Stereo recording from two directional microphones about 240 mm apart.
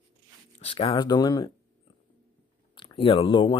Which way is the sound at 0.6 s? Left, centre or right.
Left.